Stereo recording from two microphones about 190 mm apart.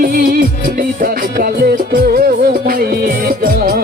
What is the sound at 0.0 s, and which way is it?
Music, 50° right (ahead or behind).